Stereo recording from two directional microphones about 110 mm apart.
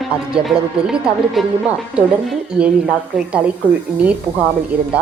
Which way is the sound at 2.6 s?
10° right (ahead or behind).